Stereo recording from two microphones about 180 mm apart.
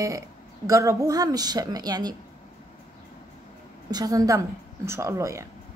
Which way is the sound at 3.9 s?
20° right (ahead or behind).